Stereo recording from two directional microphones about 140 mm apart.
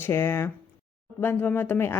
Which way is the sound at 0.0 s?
15° left (ahead or behind).